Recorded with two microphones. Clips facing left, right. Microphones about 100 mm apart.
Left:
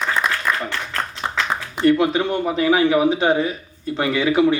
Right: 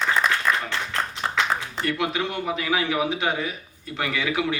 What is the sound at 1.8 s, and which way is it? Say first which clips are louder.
A man's voice: left 13 dB; 35° left (ahead or behind).